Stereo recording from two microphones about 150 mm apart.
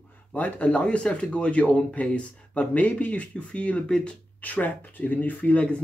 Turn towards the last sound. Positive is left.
turn(degrees=10)  # may be behind; listen again after turning